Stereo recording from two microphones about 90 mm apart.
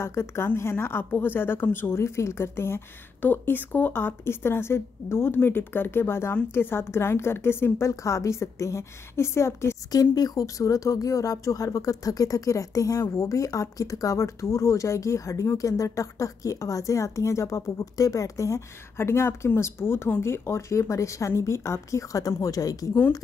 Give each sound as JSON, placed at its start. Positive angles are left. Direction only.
{"t": 0.0, "sound": "speech", "side_deg": 30}